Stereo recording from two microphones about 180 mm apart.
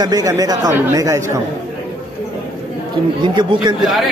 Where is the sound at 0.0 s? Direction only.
20° right (ahead or behind).